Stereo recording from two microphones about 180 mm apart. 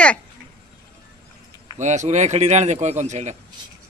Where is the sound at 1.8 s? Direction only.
40° right (ahead or behind).